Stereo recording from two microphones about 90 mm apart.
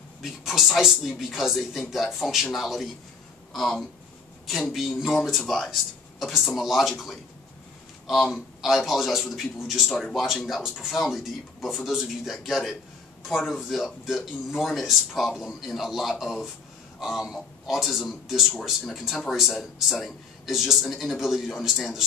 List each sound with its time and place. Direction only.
0.2 s speech: centre (ahead or behind)